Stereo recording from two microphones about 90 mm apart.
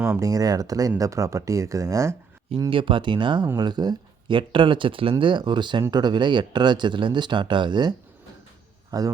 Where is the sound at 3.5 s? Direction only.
50° right (ahead or behind).